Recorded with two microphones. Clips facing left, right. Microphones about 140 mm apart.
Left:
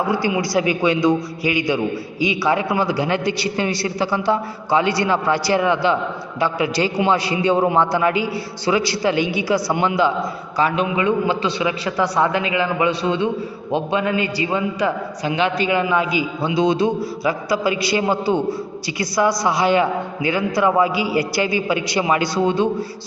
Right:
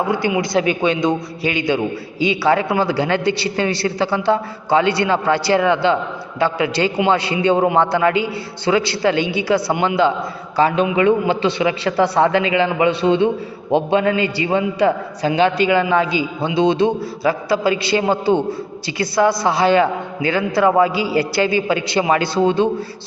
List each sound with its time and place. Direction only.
0.1 s a man's voice: 20° right (ahead or behind)